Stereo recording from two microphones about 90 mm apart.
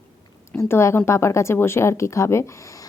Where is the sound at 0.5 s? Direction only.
30° left (ahead or behind).